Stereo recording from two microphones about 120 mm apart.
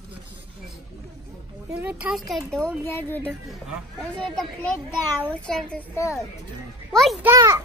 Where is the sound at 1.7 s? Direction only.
15° right (ahead or behind).